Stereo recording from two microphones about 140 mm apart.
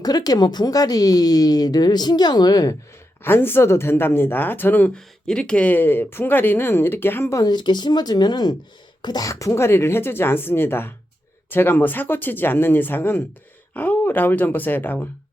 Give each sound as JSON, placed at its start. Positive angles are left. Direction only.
{"t": 0.0, "sound": "a woman's voice", "side_deg": 30}
{"t": 3.2, "sound": "speech", "side_deg": 15}